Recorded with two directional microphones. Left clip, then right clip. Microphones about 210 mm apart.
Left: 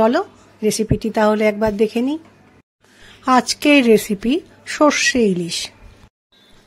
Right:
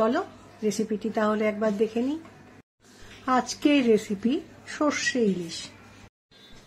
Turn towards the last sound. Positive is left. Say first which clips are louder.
# left 9 dB
turn(degrees=45)  # may be behind; listen again after turning